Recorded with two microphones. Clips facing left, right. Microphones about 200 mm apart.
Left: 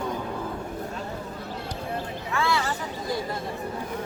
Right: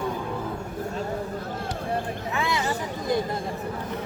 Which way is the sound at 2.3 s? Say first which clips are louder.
Left 1 dB; 20° right (ahead or behind).